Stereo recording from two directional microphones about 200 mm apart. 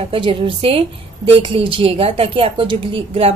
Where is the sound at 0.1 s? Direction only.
25° right (ahead or behind).